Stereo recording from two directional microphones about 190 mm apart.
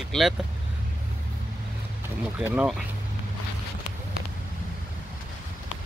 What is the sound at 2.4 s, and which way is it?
Speech, 5° right (ahead or behind).